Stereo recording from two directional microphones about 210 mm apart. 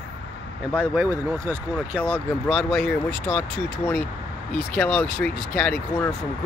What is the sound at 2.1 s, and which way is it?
Speech, centre (ahead or behind).